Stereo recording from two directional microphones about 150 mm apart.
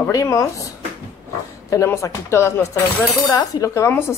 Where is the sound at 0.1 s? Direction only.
20° left (ahead or behind).